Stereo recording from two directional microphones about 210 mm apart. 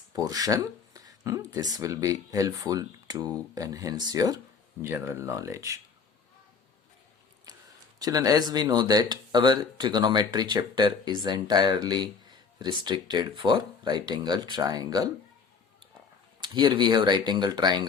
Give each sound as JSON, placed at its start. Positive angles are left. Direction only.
{"t": 0.1, "sound": "speech", "side_deg": -15}
{"t": 7.9, "sound": "speech", "side_deg": -15}
{"t": 16.4, "sound": "speech", "side_deg": -20}